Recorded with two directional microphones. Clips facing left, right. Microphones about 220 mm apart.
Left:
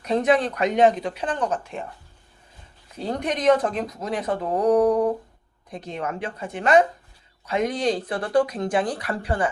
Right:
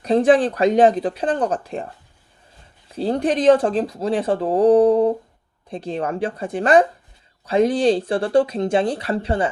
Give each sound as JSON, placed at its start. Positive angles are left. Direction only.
{"t": 0.0, "sound": "speech", "side_deg": -30}
{"t": 2.9, "sound": "speech", "side_deg": -30}